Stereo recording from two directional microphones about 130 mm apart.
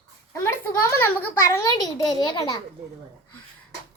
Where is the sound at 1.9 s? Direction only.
30° left (ahead or behind).